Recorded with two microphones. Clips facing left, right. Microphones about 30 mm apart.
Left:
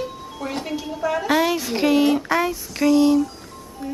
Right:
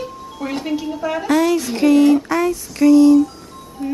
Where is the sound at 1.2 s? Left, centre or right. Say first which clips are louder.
Right 5 dB; centre.